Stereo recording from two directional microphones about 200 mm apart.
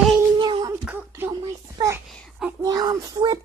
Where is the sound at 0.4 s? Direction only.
20° right (ahead or behind).